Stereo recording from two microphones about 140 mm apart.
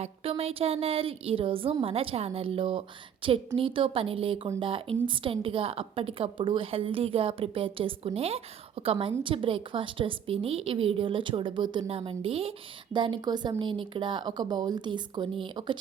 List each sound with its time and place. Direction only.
0.0 s a woman's voice: 45° right (ahead or behind)